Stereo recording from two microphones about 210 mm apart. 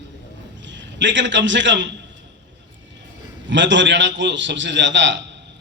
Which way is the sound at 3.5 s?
60° right (ahead or behind).